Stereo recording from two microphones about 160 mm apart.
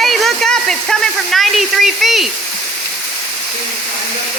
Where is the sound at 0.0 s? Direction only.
Centre (ahead or behind).